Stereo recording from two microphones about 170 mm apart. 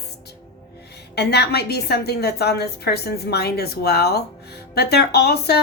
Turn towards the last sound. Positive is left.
turn(degrees=70)  # may be behind; listen again after turning